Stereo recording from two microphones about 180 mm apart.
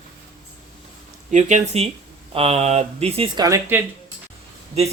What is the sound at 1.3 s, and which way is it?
Speech, 40° right (ahead or behind).